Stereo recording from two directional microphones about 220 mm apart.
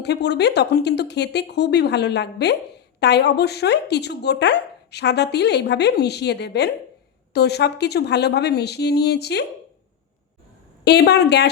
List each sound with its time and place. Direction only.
0.0 s speech: 50° left (ahead or behind)
10.8 s speech: 50° left (ahead or behind)